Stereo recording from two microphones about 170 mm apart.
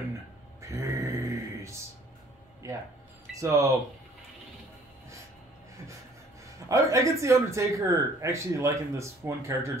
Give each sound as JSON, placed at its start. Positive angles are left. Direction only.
{"t": 0.6, "sound": "mantra", "side_deg": -15}
{"t": 2.6, "sound": "a sound", "side_deg": -20}
{"t": 3.3, "sound": "speech", "side_deg": -20}
{"t": 6.7, "sound": "speech", "side_deg": -20}